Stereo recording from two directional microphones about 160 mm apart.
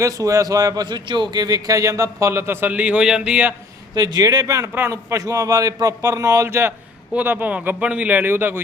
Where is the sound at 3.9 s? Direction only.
25° right (ahead or behind).